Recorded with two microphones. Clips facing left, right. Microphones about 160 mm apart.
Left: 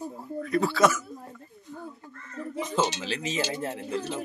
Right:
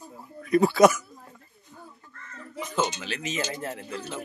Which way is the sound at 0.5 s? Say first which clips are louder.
Right 5 dB; 15° right (ahead or behind).